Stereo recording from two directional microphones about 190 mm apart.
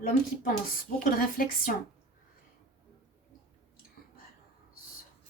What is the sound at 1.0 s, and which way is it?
Speech, 45° left (ahead or behind).